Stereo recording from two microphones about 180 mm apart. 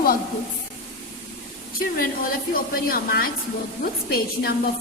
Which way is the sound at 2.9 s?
55° left (ahead or behind).